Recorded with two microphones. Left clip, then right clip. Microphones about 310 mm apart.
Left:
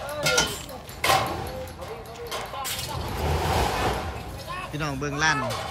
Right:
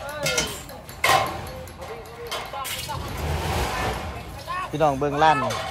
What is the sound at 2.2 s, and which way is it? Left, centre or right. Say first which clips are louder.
Music: right 1 dB; centre.